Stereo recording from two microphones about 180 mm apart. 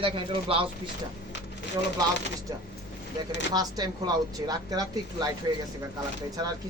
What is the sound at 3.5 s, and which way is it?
Speech, 20° right (ahead or behind).